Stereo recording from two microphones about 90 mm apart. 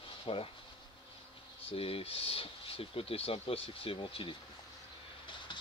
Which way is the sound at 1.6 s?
90° left.